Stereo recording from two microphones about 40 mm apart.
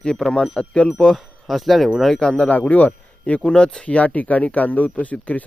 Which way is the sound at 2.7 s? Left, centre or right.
Left.